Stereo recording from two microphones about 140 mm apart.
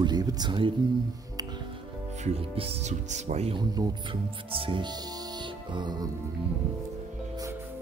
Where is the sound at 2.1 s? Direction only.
50° right (ahead or behind).